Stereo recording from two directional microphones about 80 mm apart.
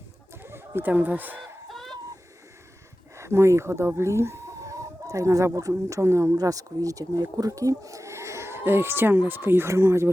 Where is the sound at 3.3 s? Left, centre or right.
Right.